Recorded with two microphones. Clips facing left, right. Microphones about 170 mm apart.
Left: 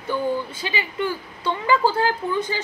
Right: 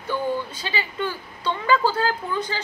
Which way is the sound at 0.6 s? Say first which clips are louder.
Left 2 dB; 15° left (ahead or behind).